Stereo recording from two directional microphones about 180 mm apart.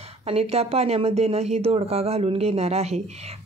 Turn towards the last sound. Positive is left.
turn(degrees=-35)  # may be behind; listen again after turning